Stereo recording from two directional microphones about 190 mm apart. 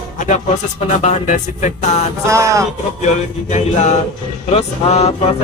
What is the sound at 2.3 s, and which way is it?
Speech, 15° right (ahead or behind).